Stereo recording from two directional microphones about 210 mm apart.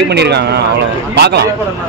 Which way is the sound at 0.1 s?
55° right (ahead or behind).